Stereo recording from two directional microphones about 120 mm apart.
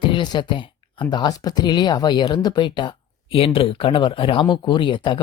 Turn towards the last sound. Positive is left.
turn(degrees=45)  # may be behind; listen again after turning